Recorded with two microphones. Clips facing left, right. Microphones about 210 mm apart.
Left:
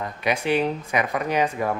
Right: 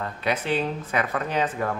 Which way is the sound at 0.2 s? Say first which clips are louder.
Left 3 dB; 15° left (ahead or behind).